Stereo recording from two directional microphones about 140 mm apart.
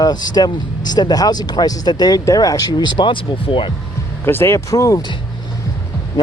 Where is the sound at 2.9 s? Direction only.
35° left (ahead or behind).